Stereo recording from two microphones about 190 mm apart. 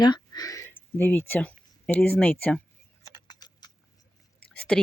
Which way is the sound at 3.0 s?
20° left (ahead or behind).